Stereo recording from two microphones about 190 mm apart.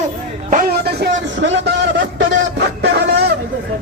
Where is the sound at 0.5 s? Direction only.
50° right (ahead or behind).